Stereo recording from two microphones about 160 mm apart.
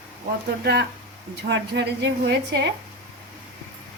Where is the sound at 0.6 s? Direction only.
90° right.